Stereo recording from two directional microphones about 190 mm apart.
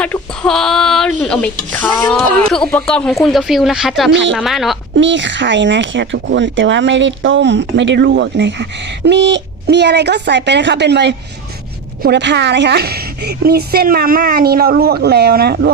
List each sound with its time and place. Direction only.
0.0 s speech: 5° left (ahead or behind)
4.1 s speech: 75° right (ahead or behind)
4.4 s speech: centre (ahead or behind)
4.9 s a woman's voice: 70° right (ahead or behind); by 15.7 s 55° right (ahead or behind)